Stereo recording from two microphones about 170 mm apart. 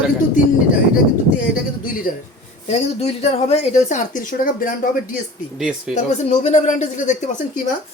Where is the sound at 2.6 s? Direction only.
40° left (ahead or behind).